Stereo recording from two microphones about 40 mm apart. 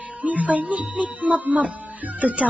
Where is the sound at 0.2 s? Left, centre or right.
Right.